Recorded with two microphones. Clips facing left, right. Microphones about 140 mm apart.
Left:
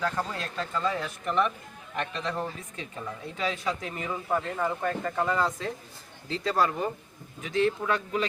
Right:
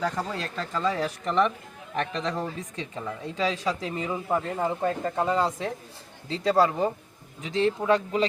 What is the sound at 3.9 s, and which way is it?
Speech, 25° right (ahead or behind).